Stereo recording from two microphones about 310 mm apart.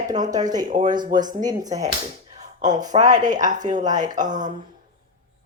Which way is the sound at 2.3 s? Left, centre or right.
Right.